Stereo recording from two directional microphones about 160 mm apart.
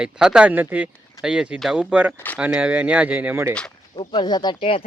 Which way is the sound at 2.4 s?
10° right (ahead or behind).